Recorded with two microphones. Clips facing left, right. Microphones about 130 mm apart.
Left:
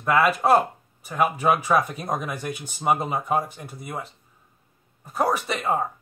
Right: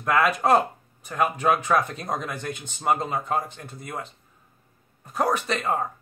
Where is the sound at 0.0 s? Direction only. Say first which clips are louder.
Left 2 dB; 5° left (ahead or behind).